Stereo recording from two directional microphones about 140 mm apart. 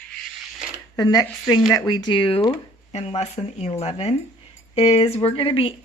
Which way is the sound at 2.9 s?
50° left (ahead or behind).